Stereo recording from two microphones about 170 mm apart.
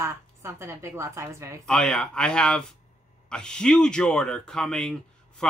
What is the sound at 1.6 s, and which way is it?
Speech, 5° left (ahead or behind).